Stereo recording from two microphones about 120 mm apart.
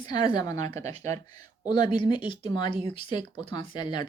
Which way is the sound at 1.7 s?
40° left (ahead or behind).